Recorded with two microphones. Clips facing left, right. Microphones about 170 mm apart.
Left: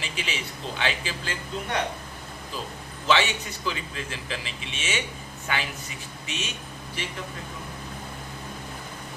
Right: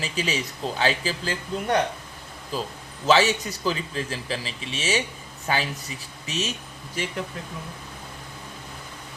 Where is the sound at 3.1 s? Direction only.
35° right (ahead or behind).